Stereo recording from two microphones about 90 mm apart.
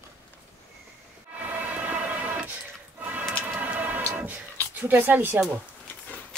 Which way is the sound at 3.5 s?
15° right (ahead or behind).